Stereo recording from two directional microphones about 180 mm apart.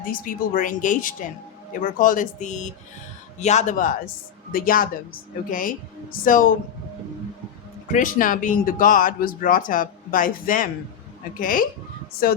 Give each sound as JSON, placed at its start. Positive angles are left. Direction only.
{"t": 0.0, "sound": "speech", "side_deg": 50}
{"t": 7.9, "sound": "speech", "side_deg": 45}